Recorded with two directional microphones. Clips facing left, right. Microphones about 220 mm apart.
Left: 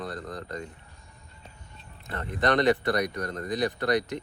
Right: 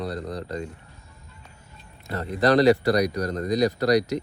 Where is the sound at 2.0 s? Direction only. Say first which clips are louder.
Right 5 dB; 40° right (ahead or behind).